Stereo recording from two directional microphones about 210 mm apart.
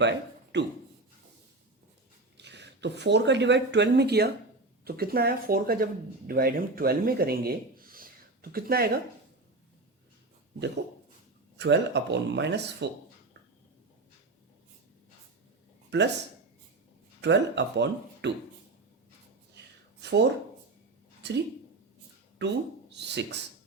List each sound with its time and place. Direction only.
0.0 s speech: 55° right (ahead or behind)
2.4 s speech: 55° right (ahead or behind)
11.5 s speech: 55° right (ahead or behind)
17.2 s speech: 55° right (ahead or behind)
20.0 s speech: 55° right (ahead or behind)
22.4 s speech: 55° right (ahead or behind)